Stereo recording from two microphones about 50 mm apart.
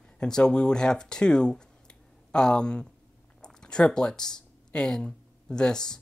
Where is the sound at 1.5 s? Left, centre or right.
Centre.